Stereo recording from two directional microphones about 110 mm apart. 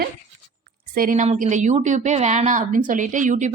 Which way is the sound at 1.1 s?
90° right.